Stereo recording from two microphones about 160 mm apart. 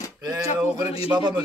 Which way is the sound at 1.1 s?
10° right (ahead or behind).